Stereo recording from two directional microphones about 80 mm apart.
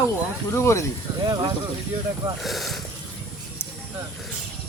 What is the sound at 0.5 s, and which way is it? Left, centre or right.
Speech, left.